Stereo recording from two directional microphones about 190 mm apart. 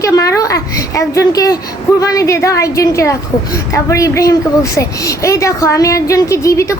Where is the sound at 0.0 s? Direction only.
15° left (ahead or behind).